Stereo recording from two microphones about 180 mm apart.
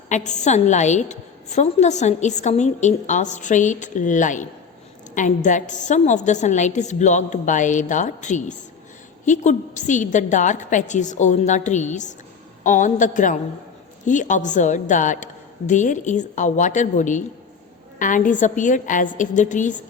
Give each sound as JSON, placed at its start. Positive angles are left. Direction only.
{"t": 0.1, "sound": "a woman's voice", "side_deg": 40}